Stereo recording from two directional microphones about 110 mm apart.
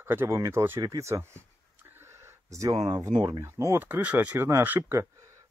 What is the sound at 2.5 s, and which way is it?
Speech, 30° right (ahead or behind).